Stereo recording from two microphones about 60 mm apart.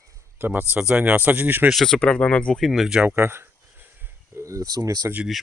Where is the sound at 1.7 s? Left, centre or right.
Centre.